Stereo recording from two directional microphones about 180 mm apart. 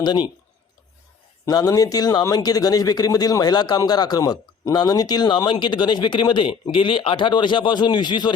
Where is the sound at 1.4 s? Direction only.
20° left (ahead or behind).